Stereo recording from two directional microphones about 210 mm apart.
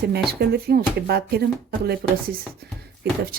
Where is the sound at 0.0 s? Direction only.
50° right (ahead or behind).